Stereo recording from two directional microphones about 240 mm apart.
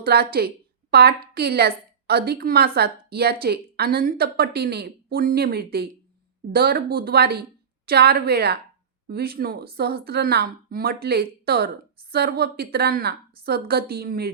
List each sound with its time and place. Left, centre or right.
0.0 s a woman's voice: right